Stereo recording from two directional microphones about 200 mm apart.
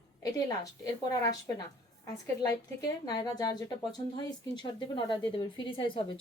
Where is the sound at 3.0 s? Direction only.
20° left (ahead or behind).